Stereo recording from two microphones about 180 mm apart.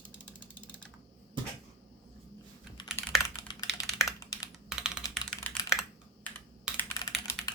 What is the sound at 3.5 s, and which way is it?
Computer keyboard, 25° left (ahead or behind).